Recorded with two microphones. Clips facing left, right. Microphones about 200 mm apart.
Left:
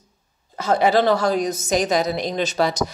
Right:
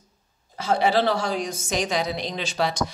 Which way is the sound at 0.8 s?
45° left (ahead or behind).